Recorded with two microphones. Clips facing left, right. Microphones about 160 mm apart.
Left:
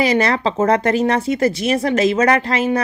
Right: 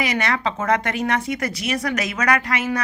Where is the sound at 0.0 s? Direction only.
30° left (ahead or behind).